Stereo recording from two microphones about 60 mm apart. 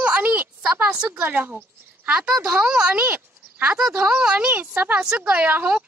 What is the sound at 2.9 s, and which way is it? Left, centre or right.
Speech, right.